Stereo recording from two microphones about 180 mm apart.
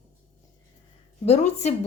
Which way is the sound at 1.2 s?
35° left (ahead or behind).